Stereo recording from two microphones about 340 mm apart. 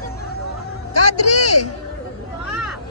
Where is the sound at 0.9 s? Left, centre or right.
Left.